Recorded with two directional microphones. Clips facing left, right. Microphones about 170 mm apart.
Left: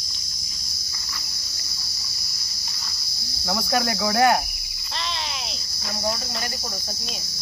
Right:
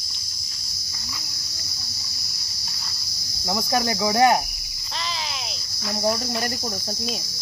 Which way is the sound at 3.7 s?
20° right (ahead or behind).